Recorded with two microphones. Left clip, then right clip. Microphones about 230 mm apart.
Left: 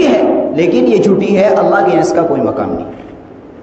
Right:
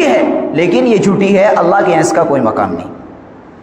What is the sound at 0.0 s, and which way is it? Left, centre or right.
Speech, right.